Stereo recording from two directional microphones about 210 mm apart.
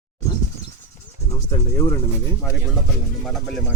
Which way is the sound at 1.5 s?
15° left (ahead or behind).